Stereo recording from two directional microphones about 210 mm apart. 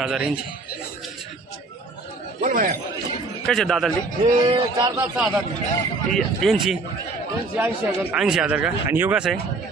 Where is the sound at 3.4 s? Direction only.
Centre (ahead or behind).